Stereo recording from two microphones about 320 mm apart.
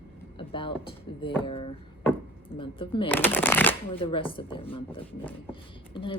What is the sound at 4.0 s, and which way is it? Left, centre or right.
A woman's voice, centre.